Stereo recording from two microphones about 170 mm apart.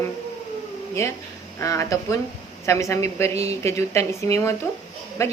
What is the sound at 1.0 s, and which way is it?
A woman's voice, 15° left (ahead or behind).